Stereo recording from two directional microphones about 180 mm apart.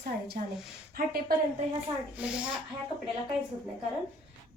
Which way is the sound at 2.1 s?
10° right (ahead or behind).